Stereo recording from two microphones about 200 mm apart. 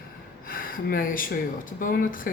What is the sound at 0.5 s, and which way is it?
Speech, 45° left (ahead or behind).